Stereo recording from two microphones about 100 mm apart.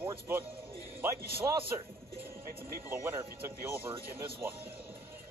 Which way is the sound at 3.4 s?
25° right (ahead or behind).